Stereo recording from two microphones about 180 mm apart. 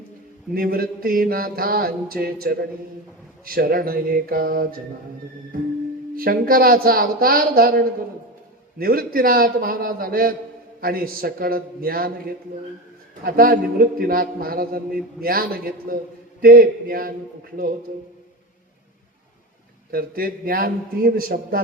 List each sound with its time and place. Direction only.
0.5 s mantra: 55° right (ahead or behind)
6.1 s mantra: 55° right (ahead or behind)
8.8 s a man's voice: 55° right (ahead or behind)
10.8 s mantra: 55° right (ahead or behind)
13.2 s mantra: 55° right (ahead or behind)
16.4 s a man's voice: 55° right (ahead or behind)
19.9 s a man's voice: 55° right (ahead or behind)